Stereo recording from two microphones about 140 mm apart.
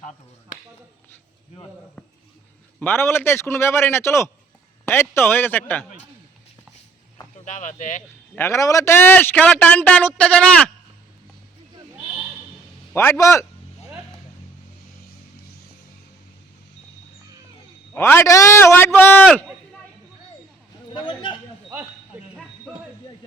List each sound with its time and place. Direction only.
2.8 s speech: 15° left (ahead or behind)
7.4 s speech: 60° left (ahead or behind)
8.4 s speech: 20° left (ahead or behind)
12.9 s speech: 15° left (ahead or behind)
17.9 s speech: 15° left (ahead or behind)
20.9 s a man's voice: 35° left (ahead or behind)
22.1 s a sound: 10° right (ahead or behind)